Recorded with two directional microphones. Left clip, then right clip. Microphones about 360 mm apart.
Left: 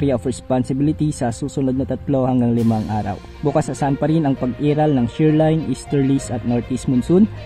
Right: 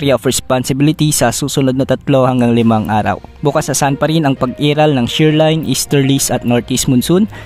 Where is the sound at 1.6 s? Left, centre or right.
Right.